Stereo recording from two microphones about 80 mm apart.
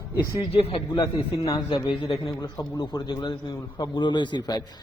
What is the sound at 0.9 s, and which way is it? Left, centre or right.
A man's voice, left.